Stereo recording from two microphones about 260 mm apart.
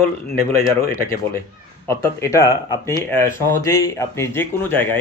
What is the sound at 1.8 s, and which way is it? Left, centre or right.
Speech, centre.